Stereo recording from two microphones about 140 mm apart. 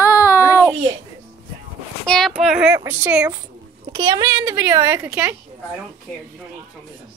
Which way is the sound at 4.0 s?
30° right (ahead or behind).